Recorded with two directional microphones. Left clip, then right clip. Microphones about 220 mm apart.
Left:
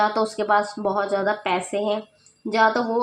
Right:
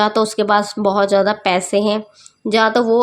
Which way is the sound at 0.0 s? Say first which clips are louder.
Right 6 dB; 45° right (ahead or behind).